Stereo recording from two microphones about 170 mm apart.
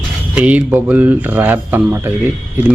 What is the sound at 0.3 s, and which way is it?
Speech, 10° right (ahead or behind).